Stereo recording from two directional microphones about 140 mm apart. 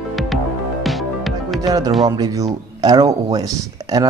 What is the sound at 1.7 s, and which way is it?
Speech, 25° right (ahead or behind).